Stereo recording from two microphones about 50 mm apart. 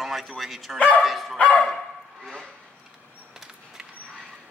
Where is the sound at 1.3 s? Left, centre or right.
Left.